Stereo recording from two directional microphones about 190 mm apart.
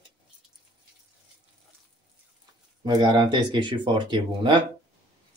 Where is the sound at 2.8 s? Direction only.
20° right (ahead or behind).